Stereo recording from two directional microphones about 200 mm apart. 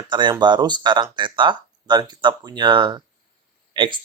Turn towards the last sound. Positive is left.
turn(degrees=-25)  # may be behind; listen again after turning